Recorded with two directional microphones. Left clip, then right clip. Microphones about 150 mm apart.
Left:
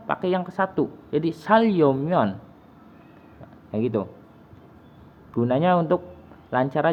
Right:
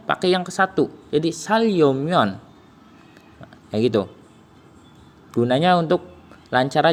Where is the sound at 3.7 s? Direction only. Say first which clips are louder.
Right 6 dB; 35° right (ahead or behind).